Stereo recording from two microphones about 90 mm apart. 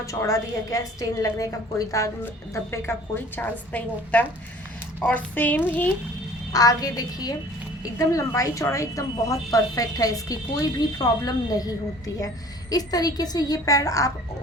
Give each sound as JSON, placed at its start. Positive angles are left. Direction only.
{"t": 0.0, "sound": "a woman's voice", "side_deg": 35}
{"t": 6.5, "sound": "a woman's voice", "side_deg": 40}